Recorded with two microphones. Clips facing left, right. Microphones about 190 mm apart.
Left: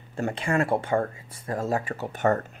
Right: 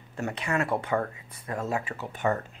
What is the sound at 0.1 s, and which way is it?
Speech, 30° left (ahead or behind).